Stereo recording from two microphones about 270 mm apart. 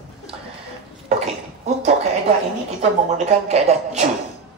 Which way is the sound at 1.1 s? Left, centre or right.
Right.